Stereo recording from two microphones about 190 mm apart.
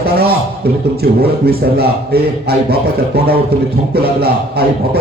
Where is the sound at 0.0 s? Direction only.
55° right (ahead or behind).